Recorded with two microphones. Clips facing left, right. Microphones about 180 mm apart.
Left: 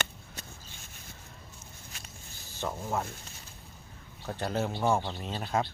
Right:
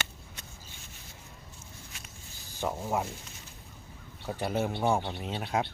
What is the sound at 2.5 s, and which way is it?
Speech, 10° right (ahead or behind).